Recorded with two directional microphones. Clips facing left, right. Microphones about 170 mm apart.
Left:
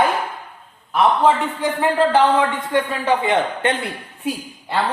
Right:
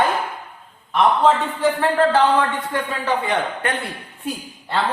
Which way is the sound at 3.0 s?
20° left (ahead or behind).